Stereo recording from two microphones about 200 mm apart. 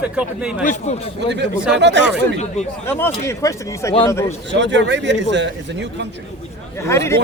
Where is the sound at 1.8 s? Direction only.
60° right (ahead or behind).